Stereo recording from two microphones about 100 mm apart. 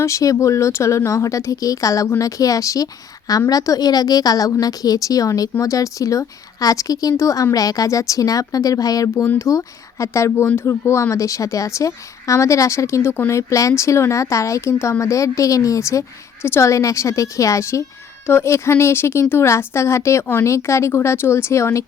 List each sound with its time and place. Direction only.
0.0 s a woman's voice: 30° left (ahead or behind)